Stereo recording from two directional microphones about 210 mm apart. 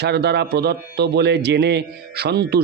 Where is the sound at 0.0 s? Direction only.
50° right (ahead or behind).